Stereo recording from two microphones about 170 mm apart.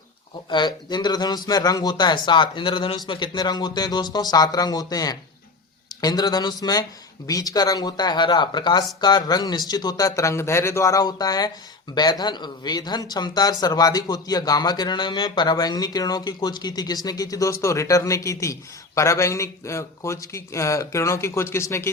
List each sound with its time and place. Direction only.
0.5 s a man's voice: 25° left (ahead or behind)